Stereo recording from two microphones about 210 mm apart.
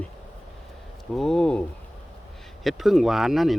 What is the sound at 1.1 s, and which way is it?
Speech, 5° left (ahead or behind).